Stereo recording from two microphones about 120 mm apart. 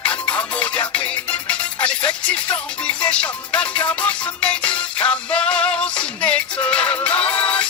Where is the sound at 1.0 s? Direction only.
10° left (ahead or behind).